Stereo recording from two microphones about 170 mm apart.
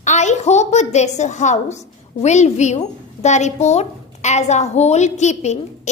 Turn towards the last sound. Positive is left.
turn(degrees=40)  # may be behind; listen again after turning